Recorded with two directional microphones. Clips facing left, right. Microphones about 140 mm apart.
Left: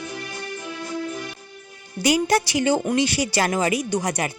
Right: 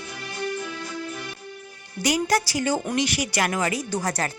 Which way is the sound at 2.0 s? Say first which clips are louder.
Left 3 dB; 25° left (ahead or behind).